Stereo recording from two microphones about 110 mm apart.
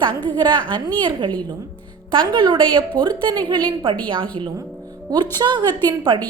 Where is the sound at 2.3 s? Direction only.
50° right (ahead or behind).